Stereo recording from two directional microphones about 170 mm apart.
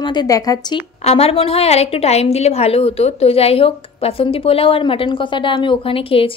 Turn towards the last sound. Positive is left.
turn(degrees=30)  # may be behind; listen again after turning